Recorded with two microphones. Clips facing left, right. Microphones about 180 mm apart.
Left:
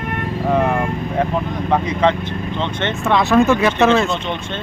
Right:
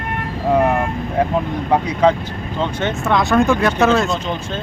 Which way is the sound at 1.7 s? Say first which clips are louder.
Right 2 dB; 10° right (ahead or behind).